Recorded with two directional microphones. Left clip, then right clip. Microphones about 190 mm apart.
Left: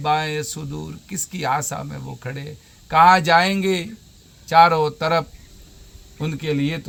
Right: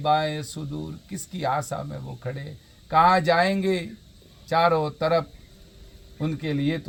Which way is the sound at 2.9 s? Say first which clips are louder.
Left 5 dB; 25° left (ahead or behind).